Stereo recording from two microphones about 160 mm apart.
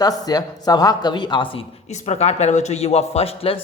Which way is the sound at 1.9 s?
45° left (ahead or behind).